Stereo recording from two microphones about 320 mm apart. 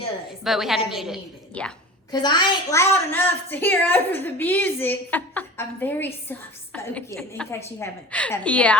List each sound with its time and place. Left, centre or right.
0.4 s a woman's voice: centre
6.7 s a sound: centre
7.2 s a woman's voice: centre